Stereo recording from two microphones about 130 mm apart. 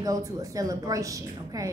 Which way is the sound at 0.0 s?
25° right (ahead or behind).